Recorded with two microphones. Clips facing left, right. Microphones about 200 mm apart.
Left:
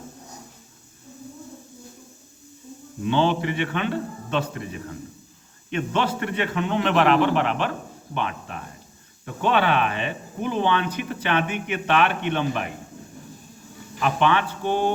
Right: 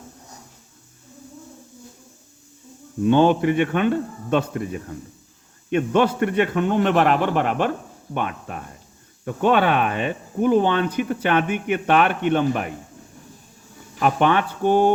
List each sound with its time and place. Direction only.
3.0 s speech: 50° right (ahead or behind)
14.0 s speech: 45° right (ahead or behind)